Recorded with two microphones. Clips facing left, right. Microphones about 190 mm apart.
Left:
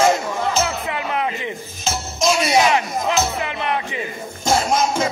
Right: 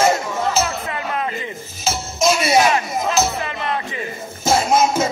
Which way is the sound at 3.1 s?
15° left (ahead or behind).